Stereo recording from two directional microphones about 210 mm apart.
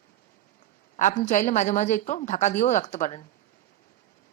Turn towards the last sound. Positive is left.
turn(degrees=35)  # may be behind; listen again after turning